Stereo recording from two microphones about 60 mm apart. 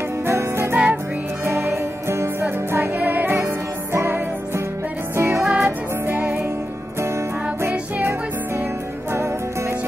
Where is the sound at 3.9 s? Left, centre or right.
Right.